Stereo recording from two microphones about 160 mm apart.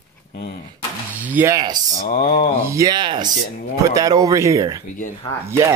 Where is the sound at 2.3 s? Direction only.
40° left (ahead or behind).